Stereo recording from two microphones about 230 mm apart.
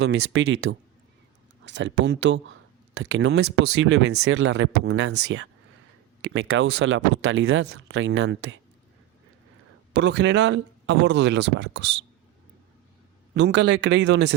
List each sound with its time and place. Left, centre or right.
0.0 s speech: right
4.4 s speech: right
6.3 s speech: right
9.9 s speech: right
13.3 s speech: right